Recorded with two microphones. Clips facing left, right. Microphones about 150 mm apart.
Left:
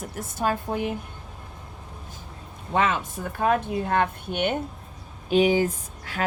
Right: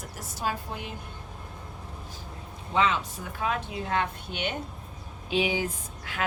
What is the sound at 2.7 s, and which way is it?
Speech, 50° left (ahead or behind).